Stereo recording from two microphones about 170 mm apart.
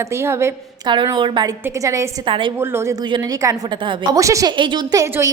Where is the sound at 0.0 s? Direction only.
15° right (ahead or behind).